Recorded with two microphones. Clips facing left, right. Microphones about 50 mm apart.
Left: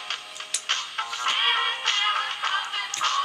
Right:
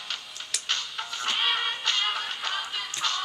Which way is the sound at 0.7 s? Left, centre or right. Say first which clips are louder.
Left 4 dB; left.